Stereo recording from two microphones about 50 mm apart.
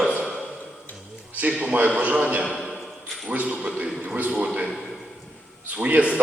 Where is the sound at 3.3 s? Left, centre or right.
Right.